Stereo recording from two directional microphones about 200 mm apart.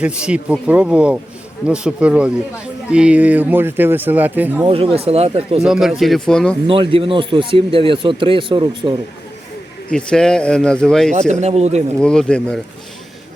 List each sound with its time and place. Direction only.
0.0 s speech: 5° right (ahead or behind)
4.6 s speech: 25° right (ahead or behind)
5.6 s speech: 5° right (ahead or behind)
6.7 s speech: 25° right (ahead or behind)
9.9 s speech: 5° left (ahead or behind)
11.1 s speech: 35° right (ahead or behind)
11.9 s speech: 5° left (ahead or behind)